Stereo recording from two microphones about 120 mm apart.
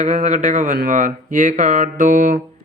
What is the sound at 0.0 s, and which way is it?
Speech, 85° right.